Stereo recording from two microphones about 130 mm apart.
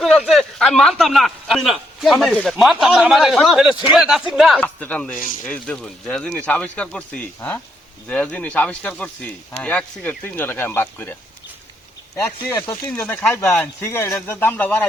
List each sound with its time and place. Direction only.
0.3 s a man's voice: centre (ahead or behind)
4.6 s speech: 10° left (ahead or behind)